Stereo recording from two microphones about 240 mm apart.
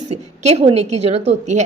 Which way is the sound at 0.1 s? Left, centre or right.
Right.